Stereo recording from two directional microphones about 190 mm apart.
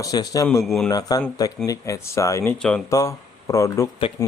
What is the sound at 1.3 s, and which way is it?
A man's voice, 20° left (ahead or behind).